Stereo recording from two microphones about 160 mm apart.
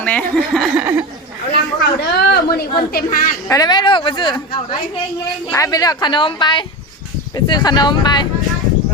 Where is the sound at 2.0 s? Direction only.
75° left (ahead or behind).